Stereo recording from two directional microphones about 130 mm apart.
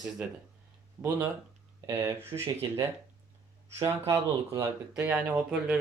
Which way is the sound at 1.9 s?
20° right (ahead or behind).